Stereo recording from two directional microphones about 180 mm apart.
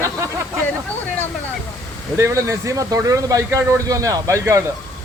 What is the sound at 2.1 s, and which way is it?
Speech, 15° right (ahead or behind).